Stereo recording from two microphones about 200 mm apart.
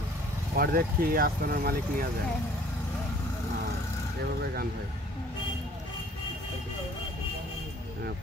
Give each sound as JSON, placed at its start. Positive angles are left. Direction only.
{"t": 0.6, "sound": "speech", "side_deg": -45}